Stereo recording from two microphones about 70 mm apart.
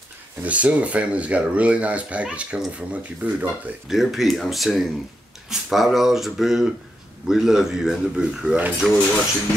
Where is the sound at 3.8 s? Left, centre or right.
Centre.